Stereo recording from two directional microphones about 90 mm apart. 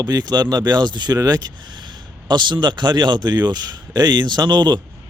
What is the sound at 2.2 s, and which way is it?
Speech, 60° right (ahead or behind).